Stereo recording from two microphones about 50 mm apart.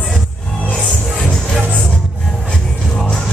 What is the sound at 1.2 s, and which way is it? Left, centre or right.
Music, centre.